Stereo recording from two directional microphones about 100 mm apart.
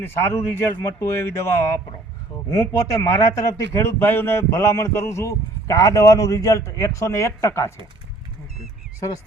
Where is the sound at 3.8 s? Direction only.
20° left (ahead or behind).